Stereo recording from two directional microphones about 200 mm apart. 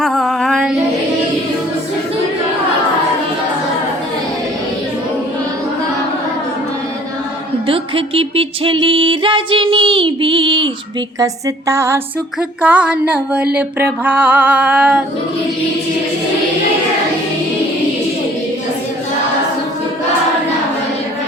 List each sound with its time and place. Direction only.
0.0 s female singing: centre (ahead or behind)
7.7 s music: 30° right (ahead or behind)
11.2 s a sound: 15° right (ahead or behind)